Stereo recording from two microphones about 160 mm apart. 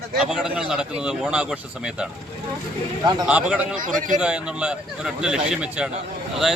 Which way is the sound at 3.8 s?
55° right (ahead or behind).